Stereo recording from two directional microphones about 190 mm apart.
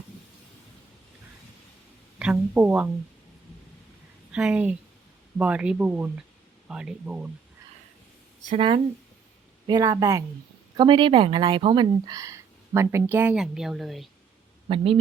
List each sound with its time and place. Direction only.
2.1 s speech: 10° right (ahead or behind)
4.3 s a woman's voice: 5° right (ahead or behind)
8.4 s speech: 30° right (ahead or behind)
9.6 s a woman's voice: 20° right (ahead or behind); by 14.1 s centre (ahead or behind)